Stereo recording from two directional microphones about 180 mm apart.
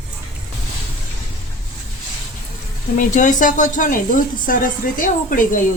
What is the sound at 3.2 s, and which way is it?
A woman's voice, 45° left (ahead or behind).